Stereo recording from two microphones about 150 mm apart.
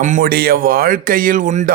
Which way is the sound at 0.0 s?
65° right (ahead or behind).